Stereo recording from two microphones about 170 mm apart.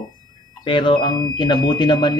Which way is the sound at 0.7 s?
30° left (ahead or behind).